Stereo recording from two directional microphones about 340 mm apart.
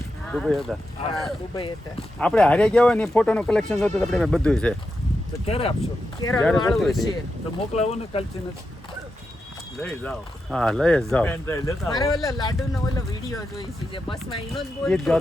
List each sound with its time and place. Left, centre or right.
0.3 s speech: centre
1.5 s speech: centre
2.1 s speech: centre
5.5 s speech: centre
5.8 s speech: centre
7.8 s speech: centre
9.8 s speech: centre
13.9 s speech: centre
14.5 s speech: centre